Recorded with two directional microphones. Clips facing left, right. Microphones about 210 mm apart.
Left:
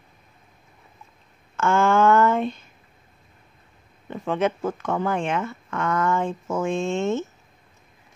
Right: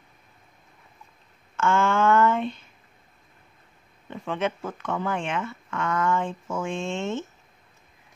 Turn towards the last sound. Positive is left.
turn(degrees=40)  # may be behind; listen again after turning